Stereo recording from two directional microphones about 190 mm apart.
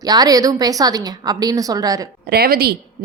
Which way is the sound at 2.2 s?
55° right (ahead or behind).